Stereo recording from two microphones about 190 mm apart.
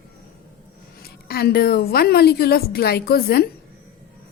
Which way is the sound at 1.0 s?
55° left (ahead or behind).